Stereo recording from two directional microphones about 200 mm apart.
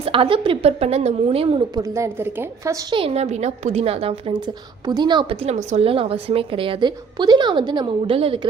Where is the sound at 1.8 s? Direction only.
15° right (ahead or behind).